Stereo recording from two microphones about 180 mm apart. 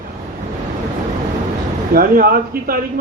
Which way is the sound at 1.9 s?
55° right (ahead or behind).